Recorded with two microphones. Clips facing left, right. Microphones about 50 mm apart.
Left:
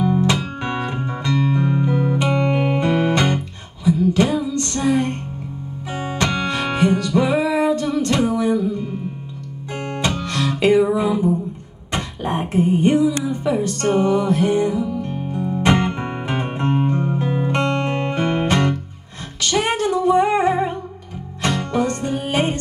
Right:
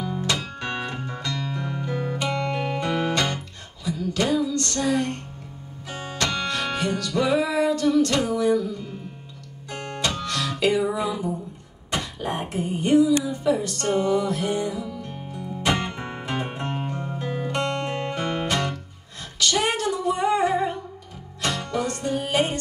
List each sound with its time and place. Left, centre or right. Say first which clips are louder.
0.0 s guitar: left 8 dB; left
5.9 s music: left 5 dB; left
11.9 s a sound: left 4 dB; left
13.2 s music: left 3 dB; left